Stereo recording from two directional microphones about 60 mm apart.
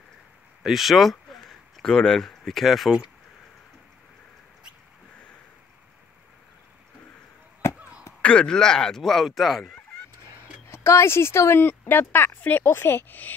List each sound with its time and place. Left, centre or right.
0.6 s speech: centre
8.2 s speech: centre
10.7 s speech: left
11.6 s speech: left